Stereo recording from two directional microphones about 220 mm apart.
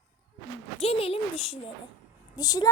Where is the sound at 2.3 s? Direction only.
15° left (ahead or behind).